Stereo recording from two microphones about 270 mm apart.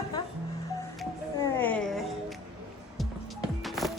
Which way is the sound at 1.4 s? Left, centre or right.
Centre.